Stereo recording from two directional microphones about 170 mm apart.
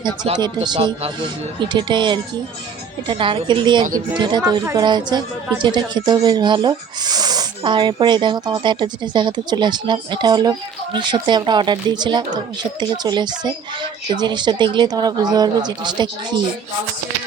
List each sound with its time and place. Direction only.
0.3 s a woman's voice: 25° right (ahead or behind)